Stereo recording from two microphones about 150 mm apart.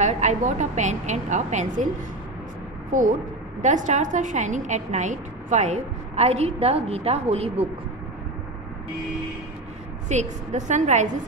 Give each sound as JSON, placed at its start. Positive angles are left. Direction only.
{"t": 0.0, "sound": "a woman's voice", "side_deg": -50}
{"t": 3.6, "sound": "a woman's voice", "side_deg": -55}
{"t": 10.0, "sound": "a woman's voice", "side_deg": -50}